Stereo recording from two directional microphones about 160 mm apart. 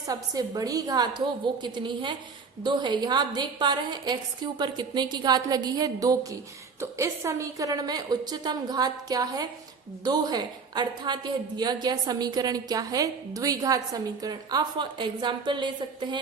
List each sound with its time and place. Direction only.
0.1 s a woman's voice: 25° right (ahead or behind)